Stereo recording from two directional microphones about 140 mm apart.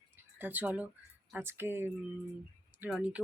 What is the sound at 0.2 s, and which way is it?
Speech, 15° right (ahead or behind).